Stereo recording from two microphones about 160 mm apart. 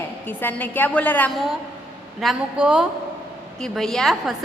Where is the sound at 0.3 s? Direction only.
10° left (ahead or behind).